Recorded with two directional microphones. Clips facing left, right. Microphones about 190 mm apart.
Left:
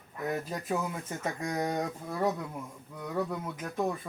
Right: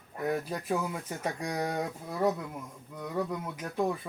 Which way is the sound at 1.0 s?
10° right (ahead or behind).